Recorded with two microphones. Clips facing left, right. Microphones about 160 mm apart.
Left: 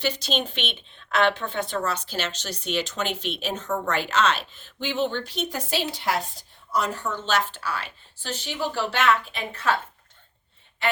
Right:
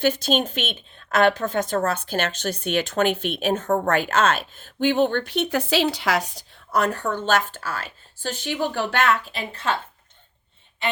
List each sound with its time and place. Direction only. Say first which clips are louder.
0.0 s a woman's voice: right 6 dB; 50° right (ahead or behind); by 9.7 s 30° right (ahead or behind)